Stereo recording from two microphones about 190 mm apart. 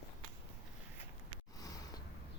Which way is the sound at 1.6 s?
20° left (ahead or behind).